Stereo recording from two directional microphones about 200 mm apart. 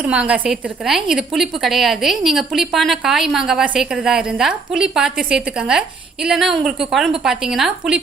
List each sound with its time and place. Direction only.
0.0 s a woman's voice: 5° right (ahead or behind)